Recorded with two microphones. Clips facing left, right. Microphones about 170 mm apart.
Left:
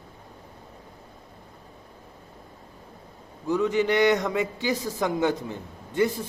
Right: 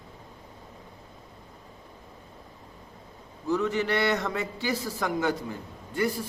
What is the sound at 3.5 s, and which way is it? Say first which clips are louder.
A man's voice: left 3 dB; 15° left (ahead or behind).